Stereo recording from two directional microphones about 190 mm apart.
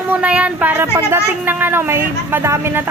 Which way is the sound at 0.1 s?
5° right (ahead or behind).